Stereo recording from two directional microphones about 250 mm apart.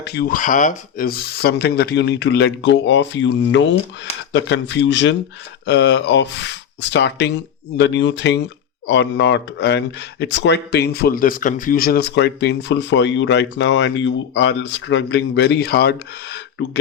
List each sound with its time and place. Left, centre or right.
0.0 s speech: left